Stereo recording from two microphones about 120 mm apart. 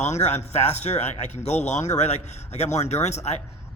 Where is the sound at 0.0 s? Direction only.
70° left (ahead or behind).